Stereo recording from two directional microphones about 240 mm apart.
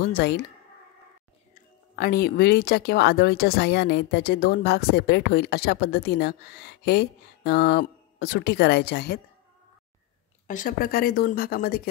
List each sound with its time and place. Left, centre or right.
0.0 s speech: left
1.5 s speech: left
10.4 s speech: left